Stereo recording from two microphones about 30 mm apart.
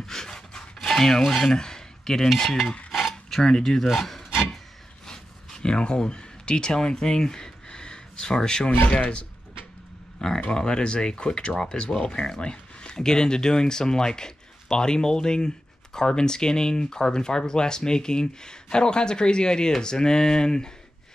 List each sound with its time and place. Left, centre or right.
0.0 s rub: centre
0.7 s cutlery: centre
3.3 s speech: centre
3.8 s a sound: centre
5.0 s a sound: left
6.0 s speech: left
7.6 s gasp: left
8.4 s speech: left
8.6 s speech: left
10.5 s speech: left